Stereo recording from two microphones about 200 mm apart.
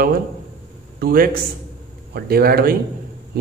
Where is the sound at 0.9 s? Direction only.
50° right (ahead or behind).